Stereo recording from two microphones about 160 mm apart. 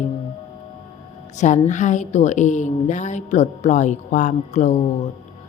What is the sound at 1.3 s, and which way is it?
Speech, 50° left (ahead or behind).